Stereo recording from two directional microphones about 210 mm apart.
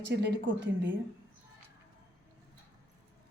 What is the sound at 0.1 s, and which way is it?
Speech, 55° right (ahead or behind).